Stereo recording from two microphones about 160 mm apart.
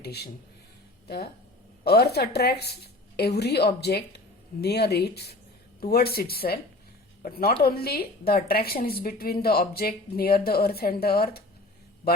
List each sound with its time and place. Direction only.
0.0 s a woman's voice: 90° left
5.8 s a woman's voice: 75° left (ahead or behind)